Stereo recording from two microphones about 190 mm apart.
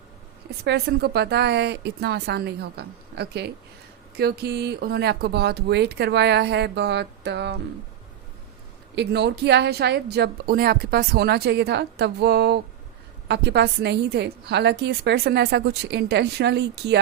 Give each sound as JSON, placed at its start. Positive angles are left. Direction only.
{"t": 0.6, "sound": "a woman's voice", "side_deg": -60}
{"t": 9.0, "sound": "a woman's voice", "side_deg": -60}